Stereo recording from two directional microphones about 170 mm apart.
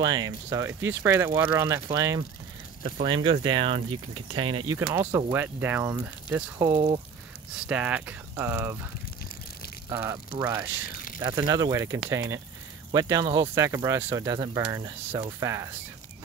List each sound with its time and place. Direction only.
0.0 s speech: 25° right (ahead or behind)
2.8 s speech: 30° right (ahead or behind)
5.3 s speech: 10° right (ahead or behind)
9.8 s speech: 15° right (ahead or behind)